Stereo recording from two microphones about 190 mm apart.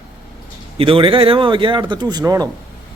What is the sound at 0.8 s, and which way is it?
Speech, 30° right (ahead or behind).